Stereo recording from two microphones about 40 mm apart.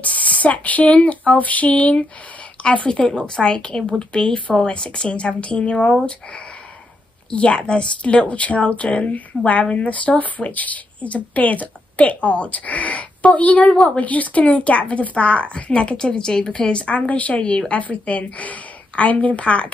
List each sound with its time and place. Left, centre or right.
0.0 s a woman's voice: left
7.2 s a woman's voice: left